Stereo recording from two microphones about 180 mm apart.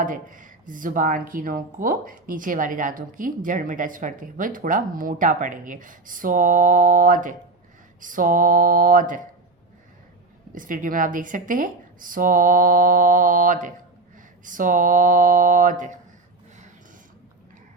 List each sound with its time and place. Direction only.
0.0 s speech: 45° right (ahead or behind)
10.5 s speech: 50° right (ahead or behind)